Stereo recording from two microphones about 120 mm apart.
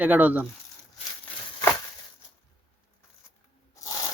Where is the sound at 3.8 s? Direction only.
30° left (ahead or behind).